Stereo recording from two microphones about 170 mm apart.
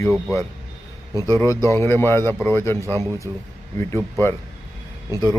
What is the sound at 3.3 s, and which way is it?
Speech, 20° right (ahead or behind).